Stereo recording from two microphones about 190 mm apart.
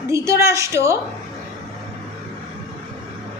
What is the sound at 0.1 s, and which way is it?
Speech, 15° right (ahead or behind).